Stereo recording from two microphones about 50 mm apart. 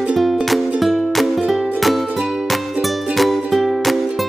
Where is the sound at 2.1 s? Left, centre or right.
Centre.